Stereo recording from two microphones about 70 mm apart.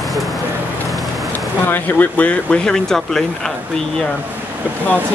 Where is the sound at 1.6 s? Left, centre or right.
Left.